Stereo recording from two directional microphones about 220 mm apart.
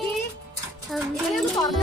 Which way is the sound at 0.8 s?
Centre (ahead or behind).